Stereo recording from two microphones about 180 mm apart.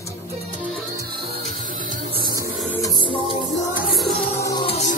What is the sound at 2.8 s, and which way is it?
Music, 25° left (ahead or behind).